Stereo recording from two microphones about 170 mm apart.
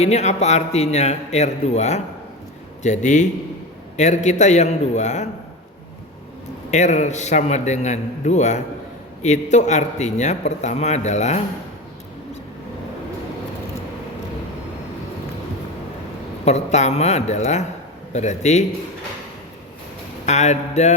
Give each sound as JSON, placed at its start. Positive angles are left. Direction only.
{"t": 0.0, "sound": "a man's voice", "side_deg": 40}
{"t": 6.7, "sound": "a man's voice", "side_deg": 45}
{"t": 16.5, "sound": "a man's voice", "side_deg": 40}
{"t": 20.2, "sound": "a man's voice", "side_deg": 40}